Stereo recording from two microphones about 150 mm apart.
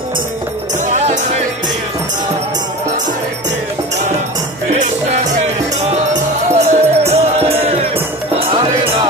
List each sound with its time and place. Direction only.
0.8 s music: 50° right (ahead or behind)
6.1 s music: 50° right (ahead or behind)